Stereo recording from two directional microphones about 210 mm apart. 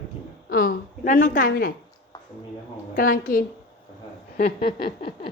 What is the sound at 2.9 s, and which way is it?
Speech, 40° left (ahead or behind).